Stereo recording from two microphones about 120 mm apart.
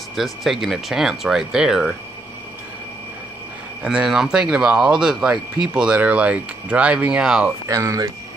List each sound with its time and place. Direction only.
0.1 s speech: centre (ahead or behind)
3.8 s speech: 10° right (ahead or behind)
7.6 s speech: 30° right (ahead or behind)